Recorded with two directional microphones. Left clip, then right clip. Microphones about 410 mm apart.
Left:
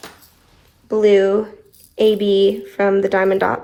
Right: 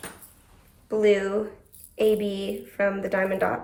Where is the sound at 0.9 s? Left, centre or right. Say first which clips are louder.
Left 8 dB; centre.